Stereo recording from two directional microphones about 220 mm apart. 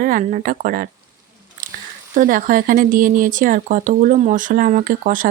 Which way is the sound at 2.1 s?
40° right (ahead or behind).